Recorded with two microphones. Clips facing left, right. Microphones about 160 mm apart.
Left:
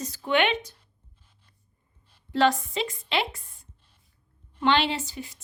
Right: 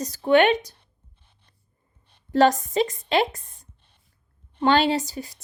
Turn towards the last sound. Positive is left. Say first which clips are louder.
# right 7 dB
turn(degrees=-40)  # may be behind; listen again after turning